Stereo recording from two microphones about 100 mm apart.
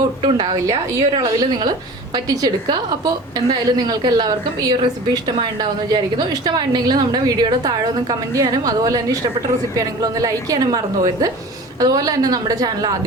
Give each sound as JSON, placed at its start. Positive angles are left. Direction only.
{"t": 0.2, "sound": "a woman's voice", "side_deg": -50}